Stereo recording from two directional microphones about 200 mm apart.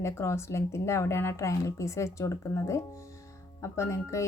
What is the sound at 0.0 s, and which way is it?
Speech, 15° left (ahead or behind).